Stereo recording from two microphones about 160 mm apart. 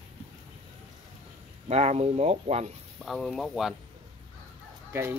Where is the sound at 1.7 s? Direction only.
40° right (ahead or behind).